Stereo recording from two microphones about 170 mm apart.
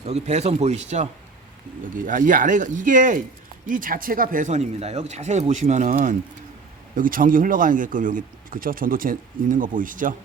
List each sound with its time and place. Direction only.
0.0 s a man's voice: 40° right (ahead or behind)